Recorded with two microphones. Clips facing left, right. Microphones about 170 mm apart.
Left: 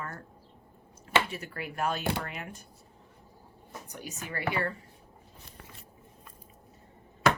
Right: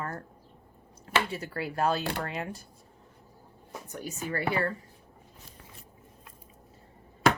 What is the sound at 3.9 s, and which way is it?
Speech, 40° right (ahead or behind).